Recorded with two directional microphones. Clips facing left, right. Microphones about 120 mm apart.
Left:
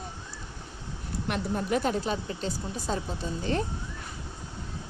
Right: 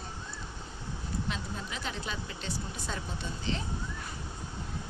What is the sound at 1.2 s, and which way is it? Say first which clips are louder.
Speech: left 8 dB; 60° left (ahead or behind).